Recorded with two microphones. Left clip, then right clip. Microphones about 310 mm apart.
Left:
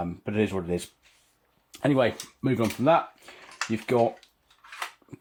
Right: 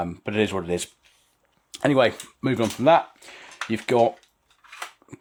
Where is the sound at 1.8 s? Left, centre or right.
Right.